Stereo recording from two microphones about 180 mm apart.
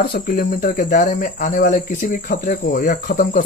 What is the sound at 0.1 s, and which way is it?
Speech, 50° left (ahead or behind).